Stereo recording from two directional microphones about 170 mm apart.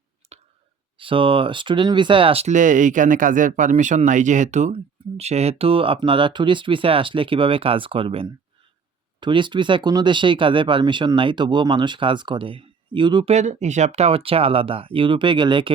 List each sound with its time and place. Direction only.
0.3 s a sound: 40° right (ahead or behind)
0.9 s speech: 30° right (ahead or behind)
13.3 s speech: 45° right (ahead or behind); by 15.7 s 25° right (ahead or behind)